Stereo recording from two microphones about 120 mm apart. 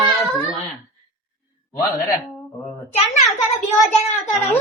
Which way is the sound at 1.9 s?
30° left (ahead or behind).